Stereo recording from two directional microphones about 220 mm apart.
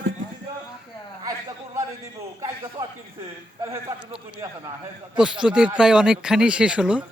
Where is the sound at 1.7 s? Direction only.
15° right (ahead or behind).